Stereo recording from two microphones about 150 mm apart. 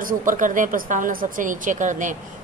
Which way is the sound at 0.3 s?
60° right (ahead or behind).